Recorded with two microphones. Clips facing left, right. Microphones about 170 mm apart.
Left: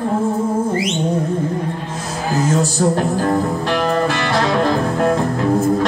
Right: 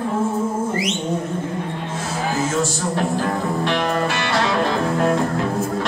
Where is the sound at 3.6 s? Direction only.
40° left (ahead or behind).